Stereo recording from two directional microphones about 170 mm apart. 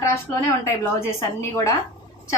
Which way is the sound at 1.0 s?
15° left (ahead or behind).